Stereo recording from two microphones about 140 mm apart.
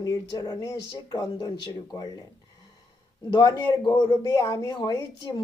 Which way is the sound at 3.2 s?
30° left (ahead or behind).